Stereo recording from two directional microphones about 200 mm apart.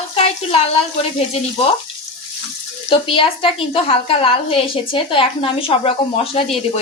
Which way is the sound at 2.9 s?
25° left (ahead or behind).